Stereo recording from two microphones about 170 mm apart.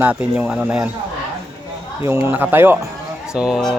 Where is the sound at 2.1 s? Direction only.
15° right (ahead or behind).